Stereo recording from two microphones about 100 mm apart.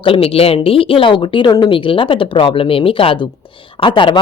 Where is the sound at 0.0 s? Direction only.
70° left (ahead or behind); by 1.7 s 40° left (ahead or behind).